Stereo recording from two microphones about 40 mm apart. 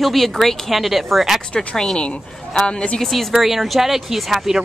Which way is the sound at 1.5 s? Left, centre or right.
Left.